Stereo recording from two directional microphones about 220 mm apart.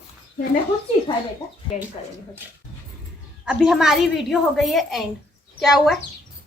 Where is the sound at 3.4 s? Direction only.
Centre (ahead or behind).